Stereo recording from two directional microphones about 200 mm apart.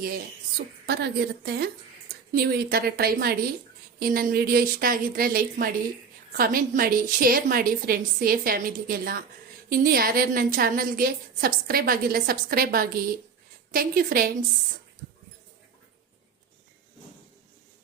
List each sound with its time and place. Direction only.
0.9 s a woman's voice: 55° right (ahead or behind)